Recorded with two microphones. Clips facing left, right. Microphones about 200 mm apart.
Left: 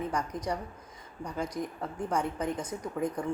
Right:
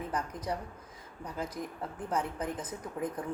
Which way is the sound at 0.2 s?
5° right (ahead or behind).